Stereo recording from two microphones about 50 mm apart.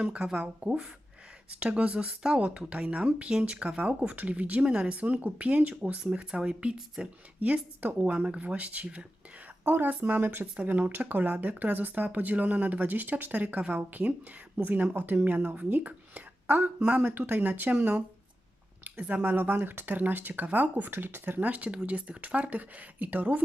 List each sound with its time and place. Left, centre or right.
0.0 s speech: centre
4.6 s speech: centre
4.9 s speech: right
8.0 s speech: right
10.4 s speech: right